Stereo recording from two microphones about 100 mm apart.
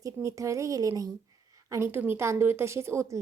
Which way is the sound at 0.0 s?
30° right (ahead or behind).